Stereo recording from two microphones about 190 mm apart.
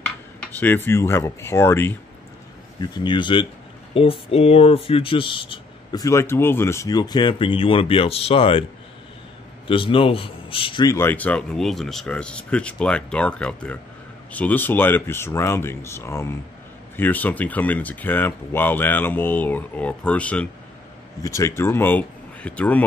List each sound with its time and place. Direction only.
0.4 s a man's voice: 10° left (ahead or behind)
2.8 s speech: 20° left (ahead or behind)
9.7 s a man's voice: 25° left (ahead or behind); by 22.8 s 5° left (ahead or behind)